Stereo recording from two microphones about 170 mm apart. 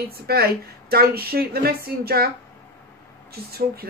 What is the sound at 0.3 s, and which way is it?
A woman's voice, 65° right (ahead or behind).